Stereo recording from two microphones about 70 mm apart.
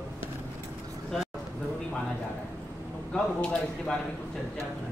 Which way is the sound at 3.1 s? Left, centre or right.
Centre.